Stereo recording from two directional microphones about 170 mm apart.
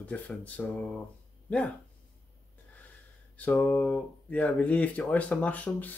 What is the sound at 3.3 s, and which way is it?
Speech, 10° left (ahead or behind).